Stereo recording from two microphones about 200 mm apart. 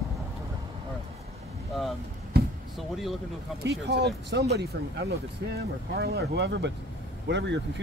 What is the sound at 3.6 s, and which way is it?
Speech, 55° right (ahead or behind).